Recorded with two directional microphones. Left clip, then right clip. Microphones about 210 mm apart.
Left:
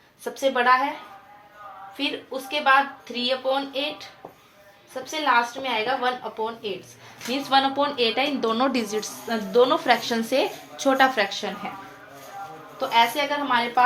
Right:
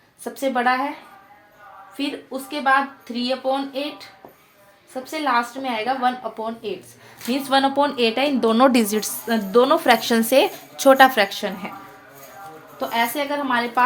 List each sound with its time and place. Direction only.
0.3 s a woman's voice: 50° right (ahead or behind)
2.0 s a woman's voice: 50° right (ahead or behind)
5.2 s a woman's voice: 50° right (ahead or behind)
12.7 s a woman's voice: 55° right (ahead or behind)